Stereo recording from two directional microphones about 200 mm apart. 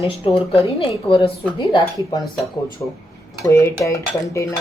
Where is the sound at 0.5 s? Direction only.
25° left (ahead or behind).